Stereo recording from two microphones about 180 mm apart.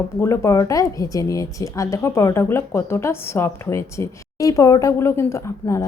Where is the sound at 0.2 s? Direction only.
15° left (ahead or behind).